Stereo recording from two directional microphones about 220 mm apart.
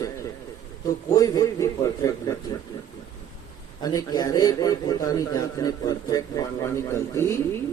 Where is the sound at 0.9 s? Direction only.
15° left (ahead or behind).